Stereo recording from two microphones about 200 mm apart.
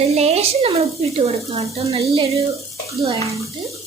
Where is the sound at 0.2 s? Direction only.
30° right (ahead or behind).